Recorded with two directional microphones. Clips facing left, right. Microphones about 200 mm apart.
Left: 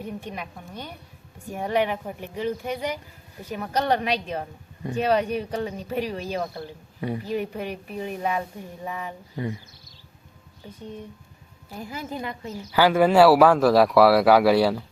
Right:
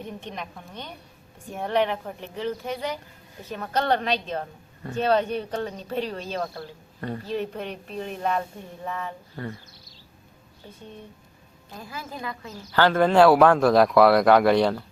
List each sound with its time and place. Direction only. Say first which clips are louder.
0.0 s speech: left 2 dB; 10° left (ahead or behind)
11.8 s a woman's voice: left 4 dB; 20° left (ahead or behind)
12.7 s speech: left 1 dB; 10° left (ahead or behind)